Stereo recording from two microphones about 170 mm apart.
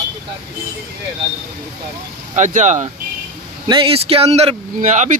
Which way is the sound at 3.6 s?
30° right (ahead or behind).